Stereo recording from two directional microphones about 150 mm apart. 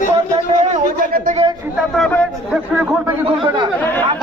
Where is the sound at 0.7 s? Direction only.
55° right (ahead or behind).